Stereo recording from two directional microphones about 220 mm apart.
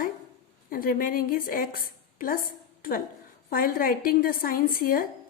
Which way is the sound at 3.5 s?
40° left (ahead or behind).